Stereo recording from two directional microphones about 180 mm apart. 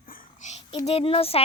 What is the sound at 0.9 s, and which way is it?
Speech, 30° left (ahead or behind).